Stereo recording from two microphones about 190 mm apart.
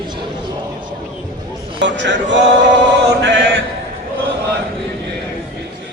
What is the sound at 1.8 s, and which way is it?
Speech, 65° right (ahead or behind).